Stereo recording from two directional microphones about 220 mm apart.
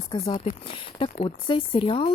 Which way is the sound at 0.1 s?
20° left (ahead or behind).